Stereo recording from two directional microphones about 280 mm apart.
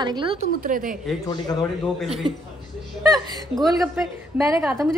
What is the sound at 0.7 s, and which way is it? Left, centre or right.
Speech, right.